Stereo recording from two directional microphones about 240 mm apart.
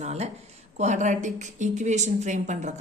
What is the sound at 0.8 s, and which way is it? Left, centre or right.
A woman's voice, right.